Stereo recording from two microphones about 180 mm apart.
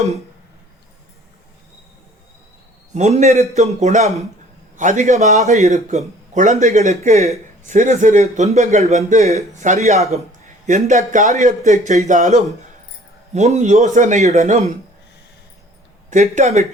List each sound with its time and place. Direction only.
2.9 s speech: 40° right (ahead or behind)
16.0 s speech: 45° right (ahead or behind)